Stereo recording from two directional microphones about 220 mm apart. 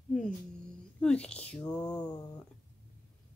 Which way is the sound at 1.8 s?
15° left (ahead or behind).